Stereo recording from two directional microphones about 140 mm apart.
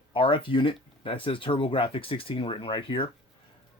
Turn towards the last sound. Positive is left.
turn(degrees=40)  # may be behind; listen again after turning